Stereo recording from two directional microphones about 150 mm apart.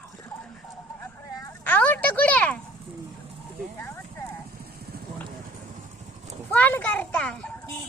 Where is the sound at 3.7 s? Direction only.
15° left (ahead or behind).